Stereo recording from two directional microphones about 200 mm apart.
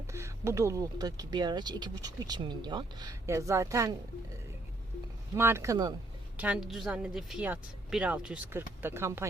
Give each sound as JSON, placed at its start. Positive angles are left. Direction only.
{"t": 0.1, "sound": "speech", "side_deg": -15}
{"t": 5.4, "sound": "speech", "side_deg": -15}
{"t": 6.3, "sound": "a woman's voice", "side_deg": -5}